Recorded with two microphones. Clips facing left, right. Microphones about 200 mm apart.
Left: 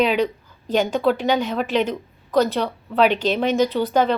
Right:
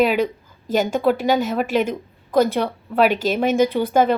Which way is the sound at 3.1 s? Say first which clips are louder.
Even; 45° right (ahead or behind).